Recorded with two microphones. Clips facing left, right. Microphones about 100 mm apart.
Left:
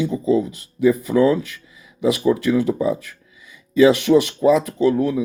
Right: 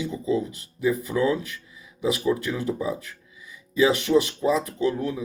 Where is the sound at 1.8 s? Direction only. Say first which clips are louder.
Left 6 dB; 85° left.